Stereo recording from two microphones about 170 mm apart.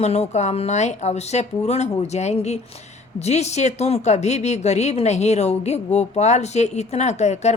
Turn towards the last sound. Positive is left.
turn(degrees=40)  # may be behind; listen again after turning